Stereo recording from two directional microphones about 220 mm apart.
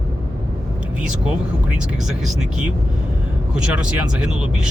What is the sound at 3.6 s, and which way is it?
Speech, 5° right (ahead or behind).